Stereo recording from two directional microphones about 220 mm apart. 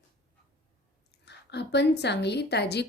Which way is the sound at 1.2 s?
50° left (ahead or behind).